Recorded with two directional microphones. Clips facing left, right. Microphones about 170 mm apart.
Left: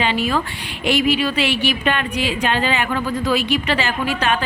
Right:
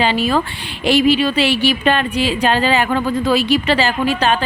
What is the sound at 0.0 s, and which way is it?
Speech, 35° right (ahead or behind).